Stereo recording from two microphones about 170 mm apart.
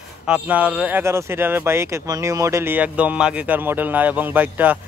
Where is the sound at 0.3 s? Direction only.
10° right (ahead or behind).